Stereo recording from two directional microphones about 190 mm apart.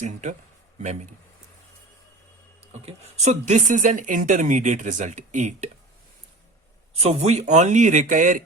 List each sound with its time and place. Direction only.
0.0 s speech: 40° right (ahead or behind)
2.7 s speech: 35° right (ahead or behind)
6.9 s speech: 35° right (ahead or behind)